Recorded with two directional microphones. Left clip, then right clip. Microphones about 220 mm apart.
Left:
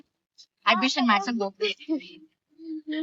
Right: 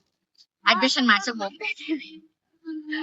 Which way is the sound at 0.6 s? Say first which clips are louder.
Right 2 dB; centre (ahead or behind).